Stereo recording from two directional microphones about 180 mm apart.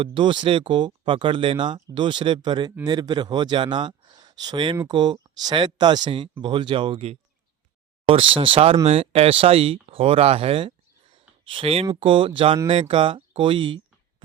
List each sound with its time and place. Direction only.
0.0 s speech: 25° right (ahead or behind)